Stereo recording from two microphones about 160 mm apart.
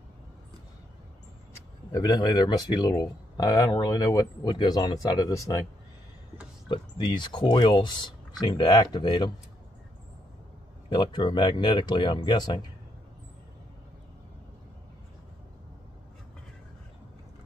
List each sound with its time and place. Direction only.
1.9 s speech: 25° left (ahead or behind)
6.7 s speech: 30° left (ahead or behind)
10.9 s speech: 30° left (ahead or behind)